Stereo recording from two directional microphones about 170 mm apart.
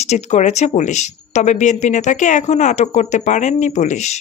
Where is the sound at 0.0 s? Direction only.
40° left (ahead or behind).